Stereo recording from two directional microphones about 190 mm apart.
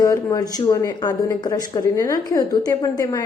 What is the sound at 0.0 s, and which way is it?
Speech, 20° left (ahead or behind).